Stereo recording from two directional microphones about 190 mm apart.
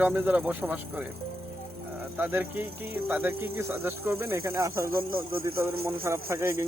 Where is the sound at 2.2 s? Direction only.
10° right (ahead or behind).